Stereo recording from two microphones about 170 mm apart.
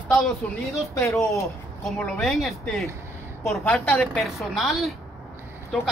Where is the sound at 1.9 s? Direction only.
5° left (ahead or behind).